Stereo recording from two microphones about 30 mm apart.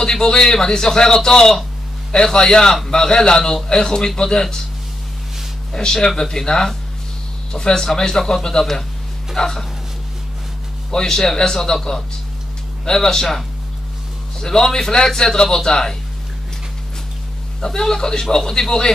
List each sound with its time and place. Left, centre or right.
0.0 s a man's voice: left
5.7 s a man's voice: left
10.9 s a man's voice: left
14.4 s a man's voice: centre
17.6 s a man's voice: centre